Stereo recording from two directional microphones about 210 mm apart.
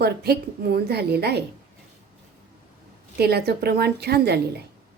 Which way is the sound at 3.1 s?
50° right (ahead or behind).